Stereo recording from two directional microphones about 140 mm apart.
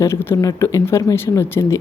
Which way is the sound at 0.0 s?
20° left (ahead or behind).